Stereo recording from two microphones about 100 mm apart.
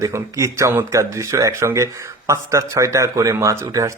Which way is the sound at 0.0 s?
30° right (ahead or behind).